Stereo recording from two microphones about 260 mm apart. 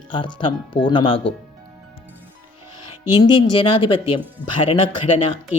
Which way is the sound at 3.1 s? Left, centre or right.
Centre.